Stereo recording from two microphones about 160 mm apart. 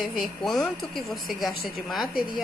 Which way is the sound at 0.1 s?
Centre (ahead or behind).